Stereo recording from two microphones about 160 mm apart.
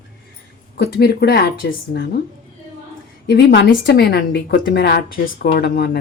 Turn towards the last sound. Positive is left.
turn(degrees=85)